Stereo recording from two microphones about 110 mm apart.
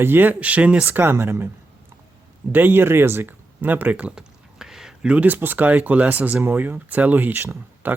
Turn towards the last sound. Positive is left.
turn(degrees=-20)  # may be behind; listen again after turning